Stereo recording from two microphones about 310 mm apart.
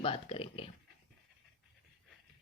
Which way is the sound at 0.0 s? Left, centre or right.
Centre.